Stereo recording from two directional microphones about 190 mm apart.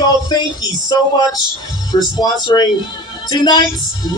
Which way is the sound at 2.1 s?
20° left (ahead or behind).